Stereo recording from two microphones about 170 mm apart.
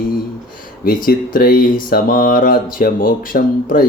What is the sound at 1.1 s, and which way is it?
Speech, 55° left (ahead or behind).